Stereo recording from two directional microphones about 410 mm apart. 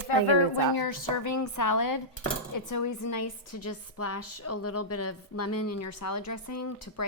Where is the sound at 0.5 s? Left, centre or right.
Left.